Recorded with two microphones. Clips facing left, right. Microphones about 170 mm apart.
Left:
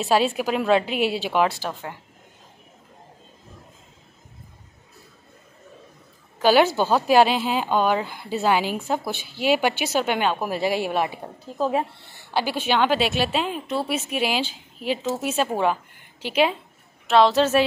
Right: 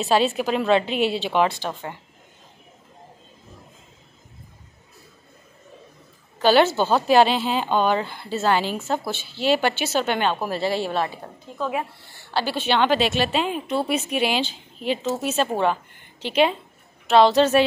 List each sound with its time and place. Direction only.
0.0 s a woman's voice: 10° left (ahead or behind)
6.4 s a woman's voice: 10° left (ahead or behind)
11.4 s speech: 35° left (ahead or behind)
12.4 s a woman's voice: 10° left (ahead or behind)